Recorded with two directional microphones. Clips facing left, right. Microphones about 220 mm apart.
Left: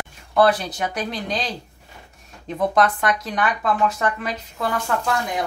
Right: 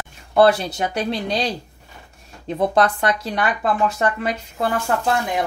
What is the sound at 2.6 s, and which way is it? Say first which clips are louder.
Speech: right 1 dB; 30° right (ahead or behind).